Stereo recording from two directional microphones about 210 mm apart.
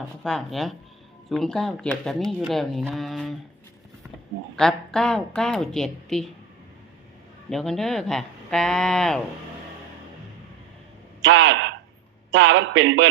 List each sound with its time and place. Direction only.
0.2 s a woman's voice: centre (ahead or behind)
4.5 s a woman's voice: 5° left (ahead or behind)
7.5 s a woman's voice: centre (ahead or behind)
11.2 s a sound: 60° right (ahead or behind)
12.3 s a man's voice: 65° right (ahead or behind)